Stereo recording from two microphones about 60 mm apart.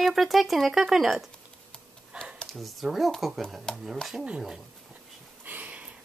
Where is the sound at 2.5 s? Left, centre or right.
Centre.